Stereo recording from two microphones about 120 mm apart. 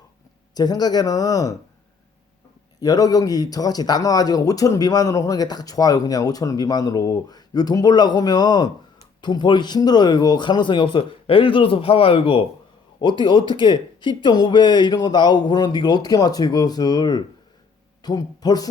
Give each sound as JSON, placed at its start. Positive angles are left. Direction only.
{"t": 0.5, "sound": "speech", "side_deg": 35}
{"t": 2.8, "sound": "speech", "side_deg": 30}
{"t": 13.0, "sound": "speech", "side_deg": 40}